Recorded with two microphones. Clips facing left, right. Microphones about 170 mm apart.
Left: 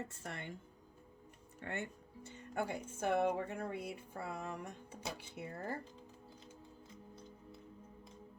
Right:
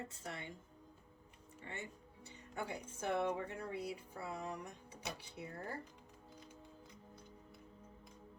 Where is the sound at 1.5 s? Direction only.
60° left (ahead or behind).